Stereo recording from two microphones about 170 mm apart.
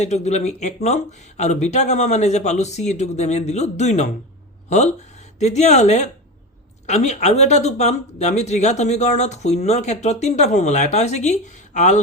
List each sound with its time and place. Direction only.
0.0 s speech: 40° left (ahead or behind)